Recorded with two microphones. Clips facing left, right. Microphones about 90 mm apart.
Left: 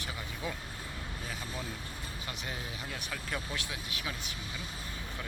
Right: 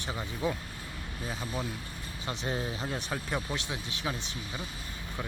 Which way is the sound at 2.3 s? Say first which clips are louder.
Right 9 dB; 30° right (ahead or behind).